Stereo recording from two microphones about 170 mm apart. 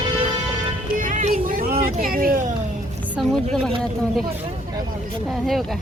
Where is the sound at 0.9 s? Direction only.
50° right (ahead or behind).